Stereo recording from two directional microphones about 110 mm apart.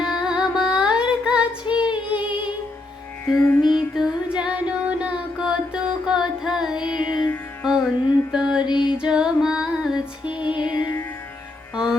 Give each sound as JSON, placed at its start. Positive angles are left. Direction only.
{"t": 0.0, "sound": "music", "side_deg": -5}
{"t": 3.2, "sound": "music", "side_deg": 20}
{"t": 3.6, "sound": "music", "side_deg": 40}
{"t": 3.9, "sound": "music", "side_deg": -5}
{"t": 7.0, "sound": "music", "side_deg": 40}
{"t": 7.6, "sound": "music", "side_deg": -5}
{"t": 8.6, "sound": "female singing", "side_deg": 45}
{"t": 9.0, "sound": "music", "side_deg": -5}
{"t": 11.7, "sound": "music", "side_deg": -5}